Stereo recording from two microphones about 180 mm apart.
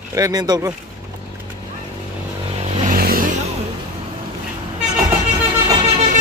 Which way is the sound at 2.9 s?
55° right (ahead or behind).